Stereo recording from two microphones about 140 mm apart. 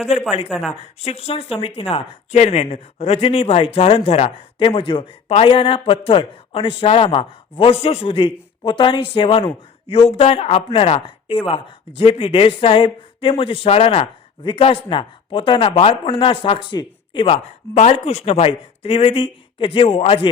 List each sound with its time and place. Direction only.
0.4 s speech: centre (ahead or behind)
0.8 s speech: 45° left (ahead or behind)
17.3 s speech: 50° left (ahead or behind)